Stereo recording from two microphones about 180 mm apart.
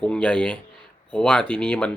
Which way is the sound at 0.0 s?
5° left (ahead or behind).